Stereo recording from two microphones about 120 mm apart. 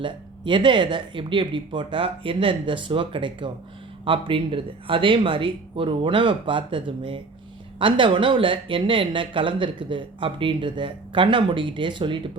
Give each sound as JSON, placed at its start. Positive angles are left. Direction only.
{"t": 0.0, "sound": "speech", "side_deg": -40}